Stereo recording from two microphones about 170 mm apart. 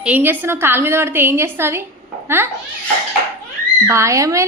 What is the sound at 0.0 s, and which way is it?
A woman's voice, 10° right (ahead or behind).